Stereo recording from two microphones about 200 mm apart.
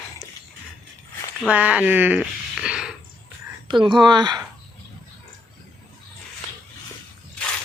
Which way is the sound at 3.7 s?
25° right (ahead or behind).